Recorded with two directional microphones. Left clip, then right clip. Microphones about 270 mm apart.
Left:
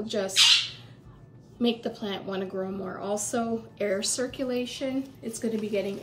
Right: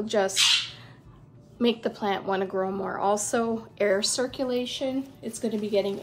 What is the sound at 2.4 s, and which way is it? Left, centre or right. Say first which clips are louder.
Speech: right 5 dB; right.